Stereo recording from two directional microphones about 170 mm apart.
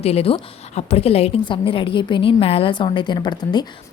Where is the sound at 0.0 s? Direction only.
35° left (ahead or behind).